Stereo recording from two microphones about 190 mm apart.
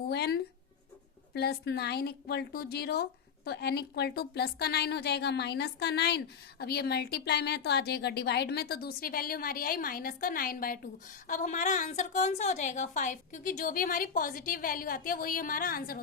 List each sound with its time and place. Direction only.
0.1 s writing: 60° left (ahead or behind)
1.3 s a woman's voice: 60° left (ahead or behind)